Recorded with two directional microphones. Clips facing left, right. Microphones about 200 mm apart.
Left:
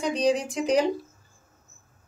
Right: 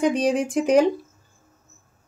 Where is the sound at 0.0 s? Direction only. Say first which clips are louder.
Right 3 dB; 50° right (ahead or behind).